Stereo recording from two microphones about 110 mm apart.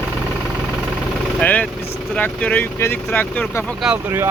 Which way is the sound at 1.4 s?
15° left (ahead or behind).